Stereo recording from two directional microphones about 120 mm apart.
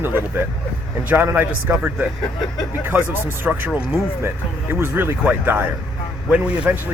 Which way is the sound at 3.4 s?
15° right (ahead or behind).